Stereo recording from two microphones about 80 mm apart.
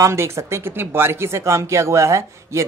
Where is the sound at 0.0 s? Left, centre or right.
Right.